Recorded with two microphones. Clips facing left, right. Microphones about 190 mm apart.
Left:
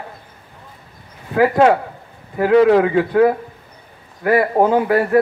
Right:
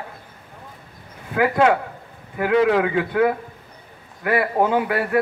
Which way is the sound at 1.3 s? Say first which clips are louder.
Left 4 dB; 35° left (ahead or behind).